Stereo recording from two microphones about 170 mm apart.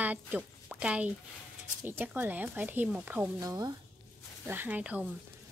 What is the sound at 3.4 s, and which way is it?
Speech, 25° right (ahead or behind).